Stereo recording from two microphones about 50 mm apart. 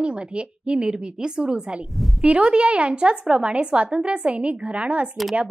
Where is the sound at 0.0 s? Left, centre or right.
Right.